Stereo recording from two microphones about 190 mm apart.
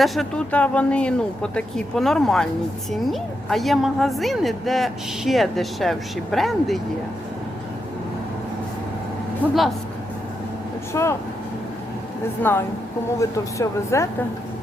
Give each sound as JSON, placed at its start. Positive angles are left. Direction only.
{"t": 0.0, "sound": "a woman's voice", "side_deg": 0}
{"t": 9.4, "sound": "speech", "side_deg": 10}
{"t": 10.9, "sound": "speech", "side_deg": 15}
{"t": 12.4, "sound": "speech", "side_deg": 10}